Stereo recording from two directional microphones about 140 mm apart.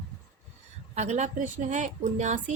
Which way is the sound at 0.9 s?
55° right (ahead or behind).